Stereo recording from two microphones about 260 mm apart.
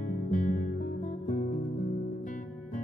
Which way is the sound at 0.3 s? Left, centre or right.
Left.